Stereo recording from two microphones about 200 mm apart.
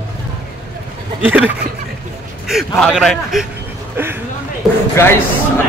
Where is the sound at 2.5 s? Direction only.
Centre (ahead or behind).